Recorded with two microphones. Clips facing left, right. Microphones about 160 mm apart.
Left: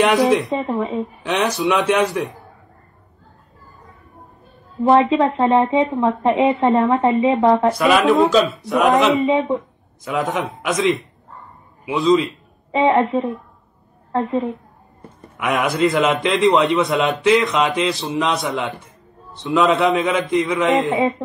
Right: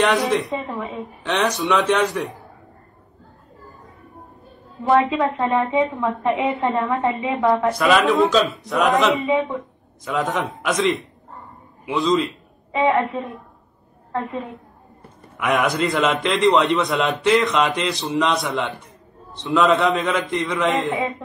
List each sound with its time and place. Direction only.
0.0 s a man's voice: centre (ahead or behind)
0.7 s speech: 25° left (ahead or behind)
1.2 s a man's voice: centre (ahead or behind)
4.8 s speech: 25° left (ahead or behind)
7.8 s a man's voice: centre (ahead or behind)
8.2 s a man's voice: 10° left (ahead or behind)
8.6 s a man's voice: centre (ahead or behind)
9.2 s speech: 20° left (ahead or behind)
10.0 s a man's voice: centre (ahead or behind)
11.8 s a man's voice: centre (ahead or behind)
12.7 s speech: 25° left (ahead or behind)
15.3 s a man's voice: centre (ahead or behind)